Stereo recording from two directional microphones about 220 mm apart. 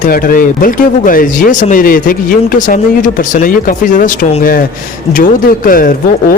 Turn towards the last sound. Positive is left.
turn(degrees=40)  # may be behind; listen again after turning